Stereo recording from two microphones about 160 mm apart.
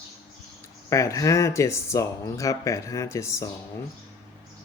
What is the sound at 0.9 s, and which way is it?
Speech, 20° left (ahead or behind).